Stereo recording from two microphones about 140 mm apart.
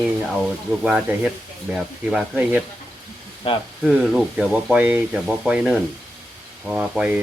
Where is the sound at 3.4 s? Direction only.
40° left (ahead or behind).